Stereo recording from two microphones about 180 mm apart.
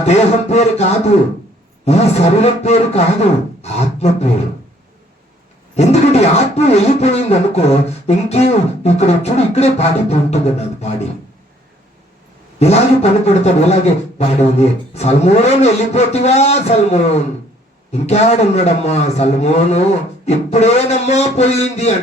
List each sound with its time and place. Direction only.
0.0 s a man's voice: 35° left (ahead or behind)
5.7 s a man's voice: 35° left (ahead or behind)
12.5 s a man's voice: 35° left (ahead or behind)